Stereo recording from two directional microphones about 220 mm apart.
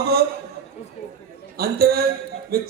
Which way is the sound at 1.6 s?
45° right (ahead or behind).